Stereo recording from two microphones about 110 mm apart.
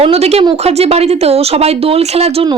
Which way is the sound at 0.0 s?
65° right (ahead or behind).